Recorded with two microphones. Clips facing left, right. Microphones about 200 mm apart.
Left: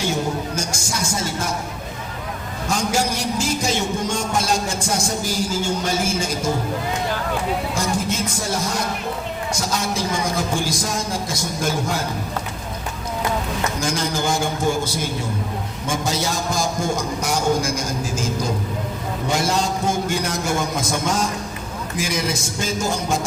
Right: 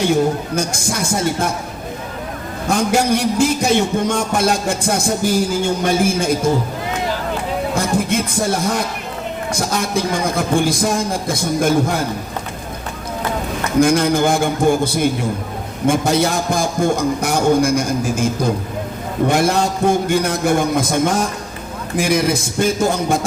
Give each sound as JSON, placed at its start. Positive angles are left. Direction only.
{"t": 0.5, "sound": "a man's voice", "side_deg": -55}
{"t": 2.6, "sound": "a man's voice", "side_deg": -60}
{"t": 7.8, "sound": "a man's voice", "side_deg": -60}
{"t": 13.7, "sound": "a man's voice", "side_deg": -60}